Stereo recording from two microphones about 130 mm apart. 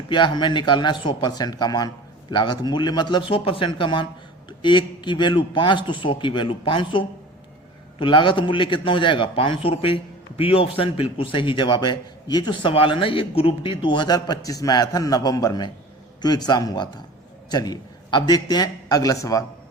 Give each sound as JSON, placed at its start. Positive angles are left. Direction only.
{"t": 0.1, "sound": "a man's voice", "side_deg": 35}